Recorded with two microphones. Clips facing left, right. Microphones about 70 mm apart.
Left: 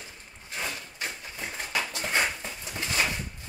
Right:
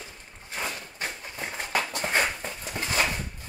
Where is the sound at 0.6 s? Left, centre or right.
Right.